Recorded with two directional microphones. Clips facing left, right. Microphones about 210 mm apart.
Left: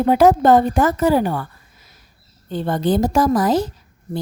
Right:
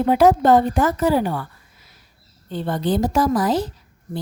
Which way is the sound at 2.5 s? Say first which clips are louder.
Left 3 dB; 45° left (ahead or behind).